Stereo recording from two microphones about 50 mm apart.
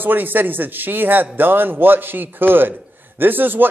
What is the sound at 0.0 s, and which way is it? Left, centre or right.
Speech, right.